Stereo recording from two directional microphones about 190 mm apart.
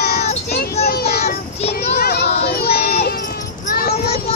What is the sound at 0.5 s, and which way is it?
Children playing, 55° left (ahead or behind).